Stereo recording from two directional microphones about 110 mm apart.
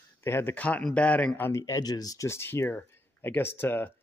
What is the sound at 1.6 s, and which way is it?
Speech, 35° left (ahead or behind).